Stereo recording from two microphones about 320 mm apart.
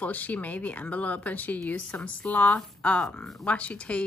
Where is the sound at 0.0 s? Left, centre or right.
Centre.